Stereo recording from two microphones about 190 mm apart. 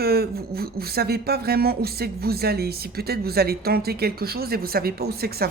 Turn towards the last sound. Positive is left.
turn(degrees=-55)  # may be behind; listen again after turning